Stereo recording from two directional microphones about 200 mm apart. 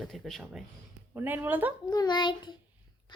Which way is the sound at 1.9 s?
20° left (ahead or behind).